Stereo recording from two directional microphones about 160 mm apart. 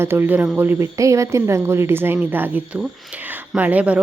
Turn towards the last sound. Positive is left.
turn(degrees=-10)  # may be behind; listen again after turning